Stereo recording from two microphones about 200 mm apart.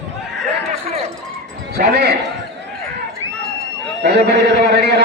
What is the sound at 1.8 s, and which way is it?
Speech, 50° right (ahead or behind).